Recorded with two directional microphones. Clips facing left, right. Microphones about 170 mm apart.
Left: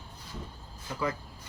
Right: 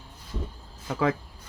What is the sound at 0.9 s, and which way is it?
Speech, 90° right.